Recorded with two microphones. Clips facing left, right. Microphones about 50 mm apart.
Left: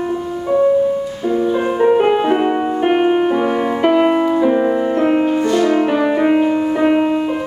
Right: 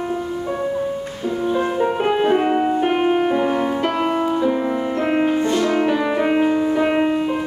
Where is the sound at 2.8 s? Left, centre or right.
Centre.